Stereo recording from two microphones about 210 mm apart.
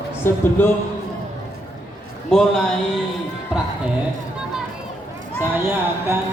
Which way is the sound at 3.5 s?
5° right (ahead or behind).